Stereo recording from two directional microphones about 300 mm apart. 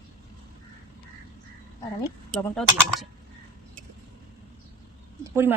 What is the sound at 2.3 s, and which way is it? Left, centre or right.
Speech, centre.